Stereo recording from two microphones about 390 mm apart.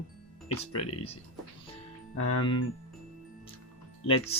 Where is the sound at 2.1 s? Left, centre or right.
Left.